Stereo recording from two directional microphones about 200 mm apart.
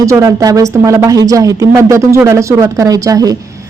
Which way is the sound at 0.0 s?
15° right (ahead or behind).